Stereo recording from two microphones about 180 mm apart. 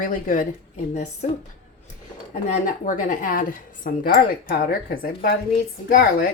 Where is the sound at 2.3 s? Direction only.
45° left (ahead or behind).